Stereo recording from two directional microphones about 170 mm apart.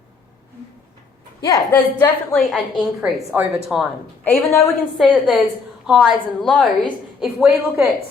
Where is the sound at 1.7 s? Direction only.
10° left (ahead or behind).